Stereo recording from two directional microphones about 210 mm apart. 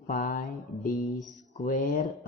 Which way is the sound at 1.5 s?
40° left (ahead or behind).